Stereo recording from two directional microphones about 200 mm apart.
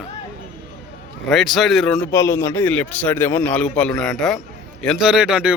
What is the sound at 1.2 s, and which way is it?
Speech, centre (ahead or behind).